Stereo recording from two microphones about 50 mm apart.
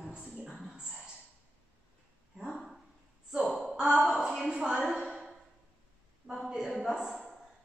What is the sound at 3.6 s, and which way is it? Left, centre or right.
A woman's voice, centre.